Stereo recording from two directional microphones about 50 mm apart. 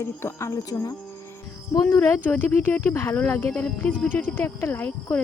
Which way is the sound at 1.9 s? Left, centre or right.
Left.